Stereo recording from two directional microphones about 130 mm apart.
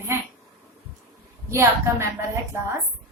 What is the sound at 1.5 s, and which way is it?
Speech, 20° right (ahead or behind).